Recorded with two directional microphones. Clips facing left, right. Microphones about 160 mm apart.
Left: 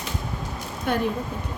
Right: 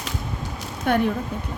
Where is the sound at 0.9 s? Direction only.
60° right (ahead or behind).